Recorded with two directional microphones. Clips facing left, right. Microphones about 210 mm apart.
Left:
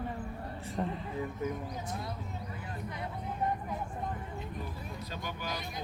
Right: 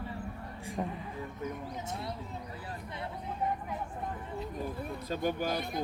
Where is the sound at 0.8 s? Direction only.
10° right (ahead or behind).